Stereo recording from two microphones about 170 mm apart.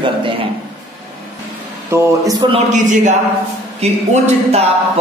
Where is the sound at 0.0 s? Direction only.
30° right (ahead or behind).